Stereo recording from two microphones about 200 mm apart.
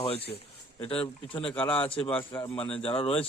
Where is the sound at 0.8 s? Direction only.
25° left (ahead or behind).